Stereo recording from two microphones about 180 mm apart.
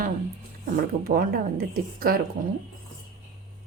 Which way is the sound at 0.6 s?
55° right (ahead or behind).